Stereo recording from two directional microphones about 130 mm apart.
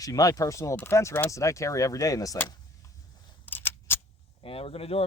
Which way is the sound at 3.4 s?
15° left (ahead or behind).